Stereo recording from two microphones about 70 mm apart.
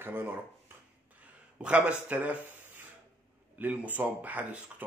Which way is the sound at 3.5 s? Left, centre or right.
Right.